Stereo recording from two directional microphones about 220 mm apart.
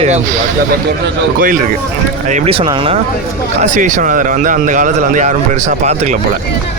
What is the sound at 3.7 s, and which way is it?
A man's voice, 35° right (ahead or behind).